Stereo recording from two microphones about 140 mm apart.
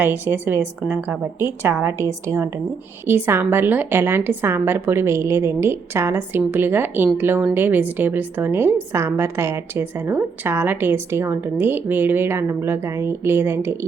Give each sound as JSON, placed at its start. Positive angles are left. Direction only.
{"t": 0.0, "sound": "a woman's voice", "side_deg": -15}